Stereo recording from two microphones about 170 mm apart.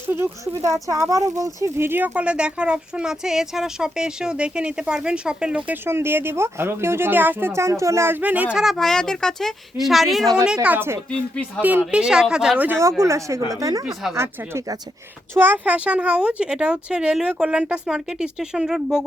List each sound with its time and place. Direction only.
0.1 s speech: 15° right (ahead or behind)
11.1 s speech: 5° left (ahead or behind)
11.9 s speech: 5° right (ahead or behind)